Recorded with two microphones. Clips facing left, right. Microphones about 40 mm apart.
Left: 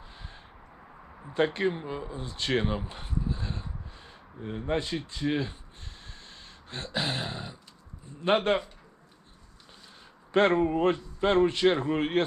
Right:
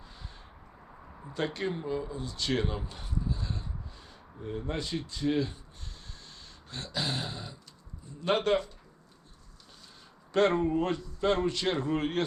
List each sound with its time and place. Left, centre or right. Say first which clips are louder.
0.0 s a sound: left 2 dB; left
1.3 s a man's voice: left 6 dB; left
10.3 s a man's voice: left 2 dB; left